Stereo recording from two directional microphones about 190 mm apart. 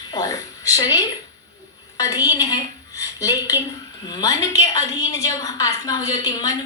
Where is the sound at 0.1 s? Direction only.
20° left (ahead or behind).